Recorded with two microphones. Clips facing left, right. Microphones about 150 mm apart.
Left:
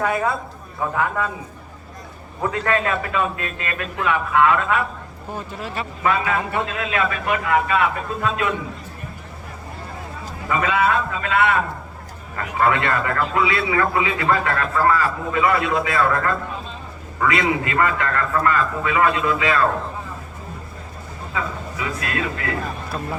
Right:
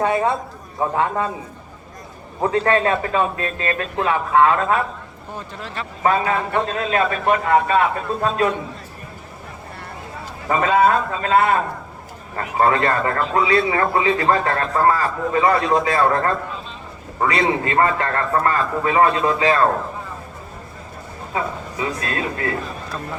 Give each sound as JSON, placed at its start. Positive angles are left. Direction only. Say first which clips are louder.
{"t": 0.0, "sound": "a man's voice", "louder": "right 3 dB", "side_deg": -25}
{"t": 2.4, "sound": "a man's voice", "louder": "right 4 dB", "side_deg": -30}
{"t": 5.5, "sound": "speech", "louder": "left 2 dB", "side_deg": 10}
{"t": 6.0, "sound": "a man's voice", "louder": "right 3 dB", "side_deg": -35}
{"t": 10.5, "sound": "a man's voice", "louder": "right 4 dB", "side_deg": -40}
{"t": 21.3, "sound": "speech", "louder": "right 3 dB", "side_deg": -30}